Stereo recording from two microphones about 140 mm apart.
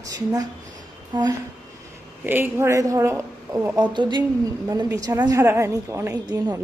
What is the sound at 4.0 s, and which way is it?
A woman's voice, 35° right (ahead or behind).